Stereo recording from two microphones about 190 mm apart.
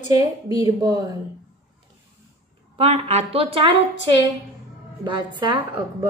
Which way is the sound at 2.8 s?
35° right (ahead or behind).